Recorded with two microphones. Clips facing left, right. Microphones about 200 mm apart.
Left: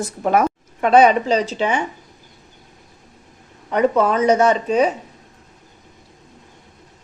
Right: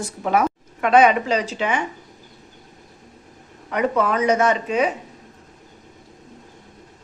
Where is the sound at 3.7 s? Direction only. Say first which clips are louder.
Left 4 dB; 30° left (ahead or behind).